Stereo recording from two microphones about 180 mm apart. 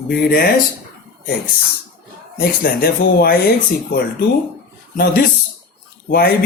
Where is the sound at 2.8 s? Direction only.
60° left (ahead or behind).